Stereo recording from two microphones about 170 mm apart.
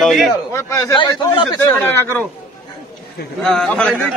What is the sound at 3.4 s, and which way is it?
Speech, 5° left (ahead or behind).